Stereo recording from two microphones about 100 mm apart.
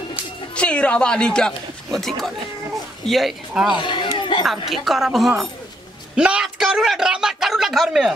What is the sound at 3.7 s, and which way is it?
Speech, 50° left (ahead or behind).